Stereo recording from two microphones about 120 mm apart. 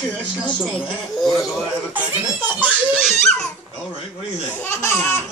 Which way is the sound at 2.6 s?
5° right (ahead or behind).